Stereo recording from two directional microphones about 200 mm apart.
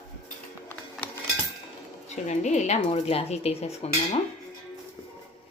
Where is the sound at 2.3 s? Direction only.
35° left (ahead or behind).